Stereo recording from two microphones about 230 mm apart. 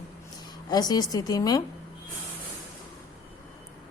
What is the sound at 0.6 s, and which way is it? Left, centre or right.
Speech, centre.